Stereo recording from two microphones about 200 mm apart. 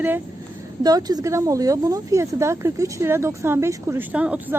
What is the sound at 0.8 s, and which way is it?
Speech, 20° right (ahead or behind).